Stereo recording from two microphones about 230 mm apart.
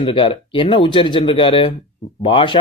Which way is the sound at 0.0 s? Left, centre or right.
Left.